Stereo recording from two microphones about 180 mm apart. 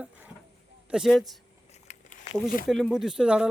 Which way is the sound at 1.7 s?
40° left (ahead or behind).